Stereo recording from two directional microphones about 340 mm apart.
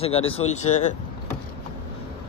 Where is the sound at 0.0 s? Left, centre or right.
Centre.